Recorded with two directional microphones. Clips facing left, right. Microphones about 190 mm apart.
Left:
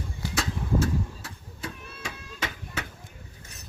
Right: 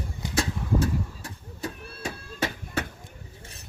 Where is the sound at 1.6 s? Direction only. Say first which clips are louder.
Right 4 dB; 35° right (ahead or behind).